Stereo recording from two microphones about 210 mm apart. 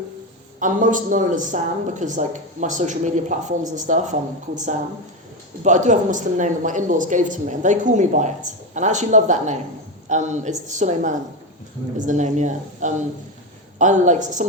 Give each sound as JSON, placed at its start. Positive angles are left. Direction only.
{"t": 0.6, "sound": "a woman's voice", "side_deg": -40}